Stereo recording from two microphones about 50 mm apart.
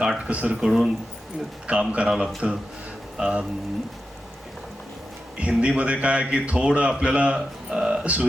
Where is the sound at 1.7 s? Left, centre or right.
Right.